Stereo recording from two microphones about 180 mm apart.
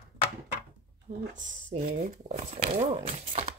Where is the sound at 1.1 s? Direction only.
60° right (ahead or behind).